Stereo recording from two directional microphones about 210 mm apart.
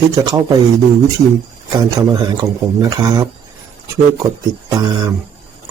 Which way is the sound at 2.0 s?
20° right (ahead or behind).